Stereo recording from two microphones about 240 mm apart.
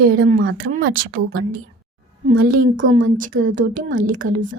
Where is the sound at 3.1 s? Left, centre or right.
Right.